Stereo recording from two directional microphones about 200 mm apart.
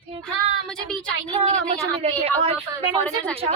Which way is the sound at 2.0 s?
30° right (ahead or behind).